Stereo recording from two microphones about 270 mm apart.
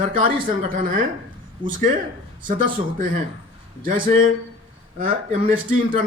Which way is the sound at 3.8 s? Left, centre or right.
Right.